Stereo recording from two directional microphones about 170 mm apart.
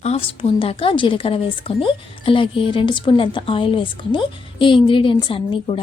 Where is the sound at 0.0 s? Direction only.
40° left (ahead or behind).